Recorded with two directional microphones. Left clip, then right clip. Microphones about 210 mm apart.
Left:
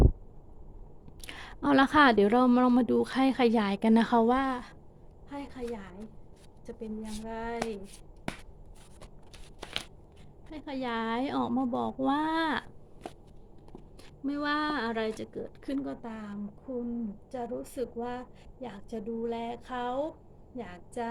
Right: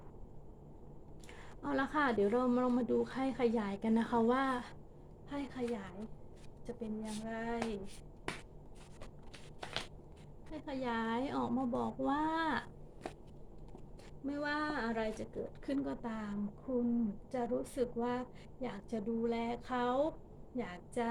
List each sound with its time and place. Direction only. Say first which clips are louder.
1.2 s a woman's voice: left 12 dB; 45° left (ahead or behind); by 7.6 s 25° left (ahead or behind)
10.5 s a woman's voice: left 4 dB; 30° left (ahead or behind)
14.3 s speech: left 7 dB; 45° left (ahead or behind)
15.6 s a woman's voice: left 3 dB; 25° left (ahead or behind)